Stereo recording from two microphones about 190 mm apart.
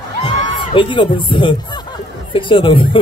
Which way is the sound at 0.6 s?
25° left (ahead or behind).